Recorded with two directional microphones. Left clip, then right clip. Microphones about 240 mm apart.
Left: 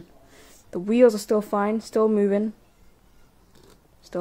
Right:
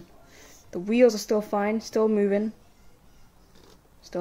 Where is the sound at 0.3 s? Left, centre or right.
Centre.